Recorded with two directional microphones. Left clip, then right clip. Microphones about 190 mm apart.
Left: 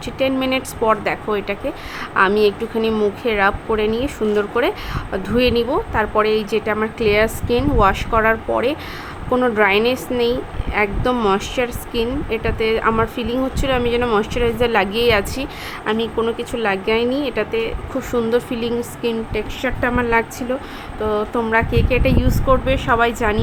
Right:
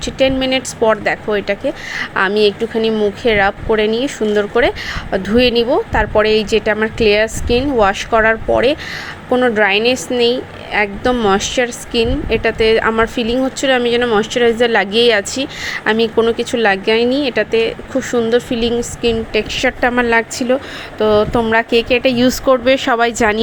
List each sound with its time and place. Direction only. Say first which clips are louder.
0.0 s a woman's voice: right 5 dB; 10° right (ahead or behind); by 23.4 s 25° right (ahead or behind)